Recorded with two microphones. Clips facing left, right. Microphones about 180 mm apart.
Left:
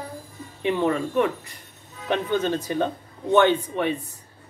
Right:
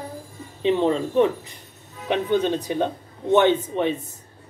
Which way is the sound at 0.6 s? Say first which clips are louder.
Right 3 dB; 20° right (ahead or behind).